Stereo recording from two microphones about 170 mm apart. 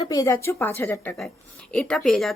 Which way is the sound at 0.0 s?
20° left (ahead or behind).